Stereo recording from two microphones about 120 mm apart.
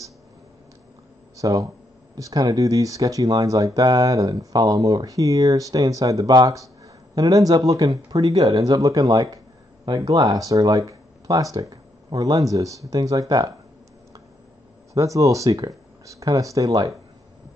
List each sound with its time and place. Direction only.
1.3 s speech: 30° right (ahead or behind)
15.0 s speech: 30° right (ahead or behind)